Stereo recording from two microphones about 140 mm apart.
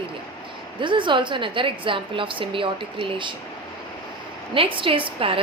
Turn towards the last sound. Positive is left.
turn(degrees=-40)  # may be behind; listen again after turning